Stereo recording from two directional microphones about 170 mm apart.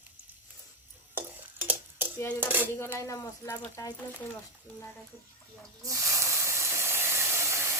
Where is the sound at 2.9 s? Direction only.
20° left (ahead or behind).